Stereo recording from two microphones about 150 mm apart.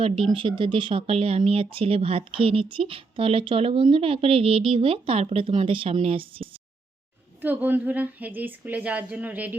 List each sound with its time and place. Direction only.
0.3 s speech: 30° right (ahead or behind)
7.4 s a woman's voice: 10° right (ahead or behind)